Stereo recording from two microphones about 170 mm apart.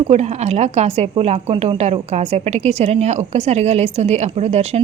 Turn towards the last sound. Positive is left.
turn(degrees=-40)  # may be behind; listen again after turning